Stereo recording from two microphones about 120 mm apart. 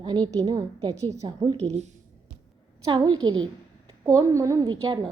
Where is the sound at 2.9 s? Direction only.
35° right (ahead or behind).